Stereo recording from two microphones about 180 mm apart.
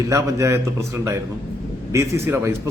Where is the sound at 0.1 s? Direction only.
15° right (ahead or behind).